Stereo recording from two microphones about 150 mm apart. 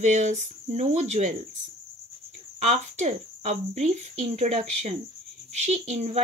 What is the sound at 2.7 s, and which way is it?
Speech, 50° right (ahead or behind).